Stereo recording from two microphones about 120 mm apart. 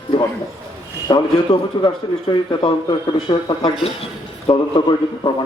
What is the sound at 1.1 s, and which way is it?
A man's voice, 45° left (ahead or behind).